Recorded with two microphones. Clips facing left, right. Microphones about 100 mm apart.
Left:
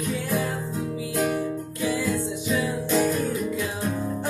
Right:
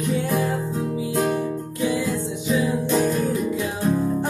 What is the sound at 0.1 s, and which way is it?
Music, 20° right (ahead or behind).